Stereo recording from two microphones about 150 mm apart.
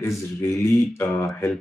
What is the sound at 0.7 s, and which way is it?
Speech, 15° left (ahead or behind).